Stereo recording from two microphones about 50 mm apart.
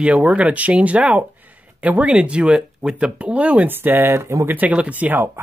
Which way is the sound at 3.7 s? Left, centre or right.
Right.